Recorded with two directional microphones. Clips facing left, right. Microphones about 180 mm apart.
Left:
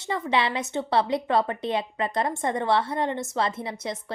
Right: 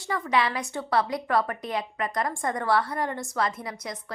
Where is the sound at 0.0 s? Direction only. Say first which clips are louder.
Left 1 dB; 25° left (ahead or behind).